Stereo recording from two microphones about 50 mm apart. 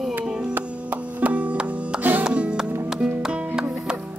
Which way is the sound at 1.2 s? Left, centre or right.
Right.